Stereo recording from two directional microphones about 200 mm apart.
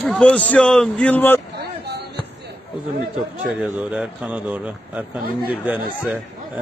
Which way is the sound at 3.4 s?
5° right (ahead or behind).